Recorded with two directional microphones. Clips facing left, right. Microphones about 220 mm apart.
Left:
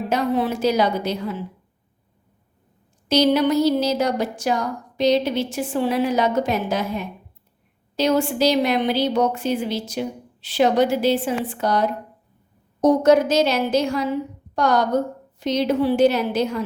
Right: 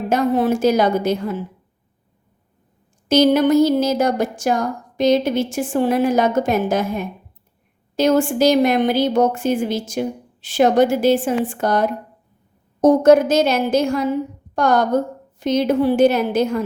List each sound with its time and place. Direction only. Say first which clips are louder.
0.1 s a woman's voice: right 5 dB; 45° right (ahead or behind)
3.1 s a woman's voice: right 4 dB; 50° right (ahead or behind)